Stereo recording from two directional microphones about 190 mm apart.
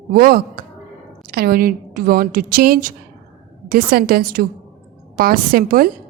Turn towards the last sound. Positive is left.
turn(degrees=-50)  # may be behind; listen again after turning